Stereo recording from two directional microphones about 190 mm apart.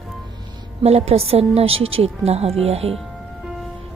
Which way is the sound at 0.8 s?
30° right (ahead or behind).